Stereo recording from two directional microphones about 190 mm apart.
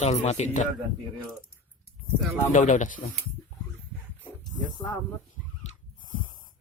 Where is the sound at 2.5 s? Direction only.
40° left (ahead or behind).